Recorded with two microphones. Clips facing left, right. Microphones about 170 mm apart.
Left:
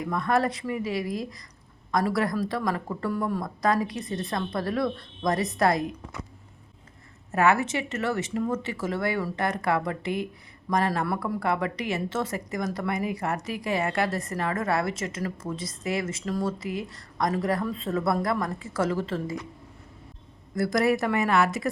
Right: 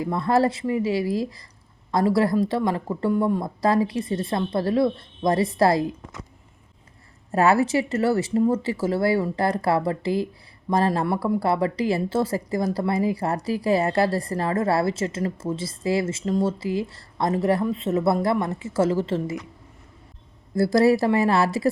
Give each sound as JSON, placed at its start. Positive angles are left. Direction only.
{"t": 0.0, "sound": "a woman's voice", "side_deg": -30}
{"t": 7.3, "sound": "a woman's voice", "side_deg": -35}
{"t": 20.6, "sound": "speech", "side_deg": -30}